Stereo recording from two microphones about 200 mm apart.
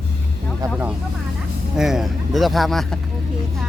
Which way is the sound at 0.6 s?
5° right (ahead or behind).